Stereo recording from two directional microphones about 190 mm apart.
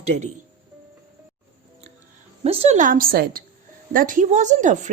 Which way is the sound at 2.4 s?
35° right (ahead or behind).